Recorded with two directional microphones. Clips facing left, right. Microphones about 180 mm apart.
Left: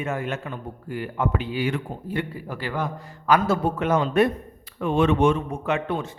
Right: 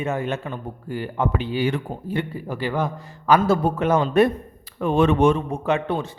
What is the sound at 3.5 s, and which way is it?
Speech, 35° right (ahead or behind).